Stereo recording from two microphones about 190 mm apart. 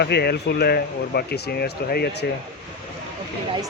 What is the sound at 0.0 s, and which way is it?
Speech, 60° left (ahead or behind).